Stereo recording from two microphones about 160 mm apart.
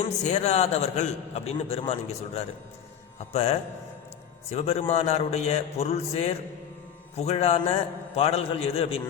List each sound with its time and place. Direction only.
0.3 s a man's voice: 45° left (ahead or behind)